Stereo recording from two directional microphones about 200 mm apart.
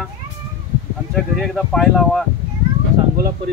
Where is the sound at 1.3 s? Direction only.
Centre (ahead or behind).